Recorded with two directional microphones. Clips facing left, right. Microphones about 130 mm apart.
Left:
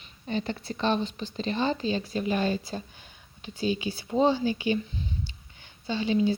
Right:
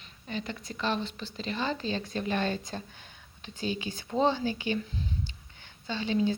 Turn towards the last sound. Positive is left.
turn(degrees=15)  # may be behind; listen again after turning